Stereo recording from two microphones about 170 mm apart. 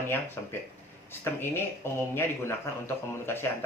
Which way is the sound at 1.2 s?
15° left (ahead or behind).